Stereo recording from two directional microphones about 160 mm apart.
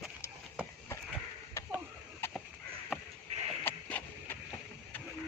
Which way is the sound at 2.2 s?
15° left (ahead or behind).